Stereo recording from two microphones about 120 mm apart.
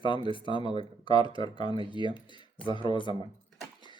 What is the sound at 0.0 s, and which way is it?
Speech, 45° left (ahead or behind).